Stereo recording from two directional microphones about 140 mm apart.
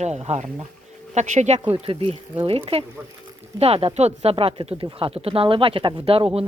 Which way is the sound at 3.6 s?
45° right (ahead or behind).